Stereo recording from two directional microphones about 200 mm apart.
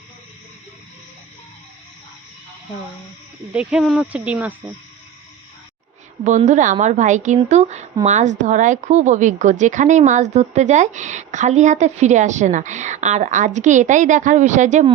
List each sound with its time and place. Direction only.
3.5 s speech: 5° right (ahead or behind)
6.2 s a woman's voice: 35° right (ahead or behind)